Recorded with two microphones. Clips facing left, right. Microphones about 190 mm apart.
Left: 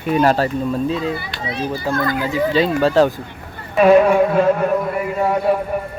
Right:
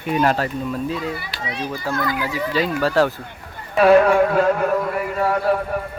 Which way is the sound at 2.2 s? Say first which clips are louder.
Left 5 dB; 25° left (ahead or behind).